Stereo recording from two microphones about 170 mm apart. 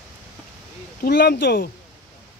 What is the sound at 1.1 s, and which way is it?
Speech, 75° left (ahead or behind).